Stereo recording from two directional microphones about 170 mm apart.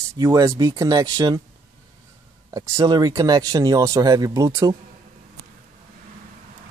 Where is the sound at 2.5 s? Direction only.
20° right (ahead or behind).